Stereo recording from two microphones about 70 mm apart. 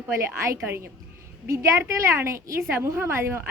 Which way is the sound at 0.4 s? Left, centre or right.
Right.